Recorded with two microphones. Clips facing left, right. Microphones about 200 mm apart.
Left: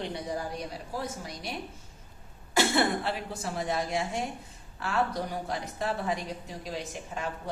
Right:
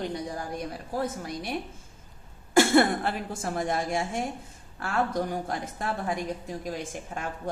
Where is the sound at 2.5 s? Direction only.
50° right (ahead or behind).